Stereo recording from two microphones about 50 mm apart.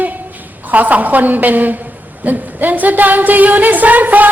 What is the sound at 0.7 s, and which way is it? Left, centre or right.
Singing, right.